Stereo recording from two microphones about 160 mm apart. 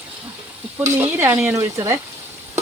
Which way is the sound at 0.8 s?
15° right (ahead or behind).